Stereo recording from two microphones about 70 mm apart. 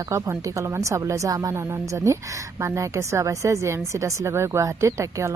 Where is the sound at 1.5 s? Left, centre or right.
Right.